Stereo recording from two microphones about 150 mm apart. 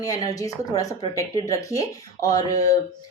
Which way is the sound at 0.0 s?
25° left (ahead or behind).